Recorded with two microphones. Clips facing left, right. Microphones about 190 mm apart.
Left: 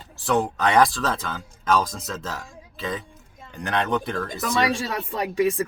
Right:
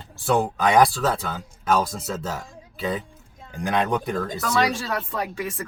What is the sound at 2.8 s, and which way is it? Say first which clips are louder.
Speech: right 3 dB; 5° right (ahead or behind).